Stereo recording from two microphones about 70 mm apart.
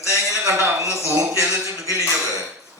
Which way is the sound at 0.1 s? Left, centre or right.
Right.